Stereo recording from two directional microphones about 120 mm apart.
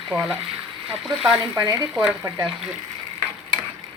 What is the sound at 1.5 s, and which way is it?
Speech, 30° right (ahead or behind).